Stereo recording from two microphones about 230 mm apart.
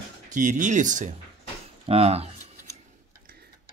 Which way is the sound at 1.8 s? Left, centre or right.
Right.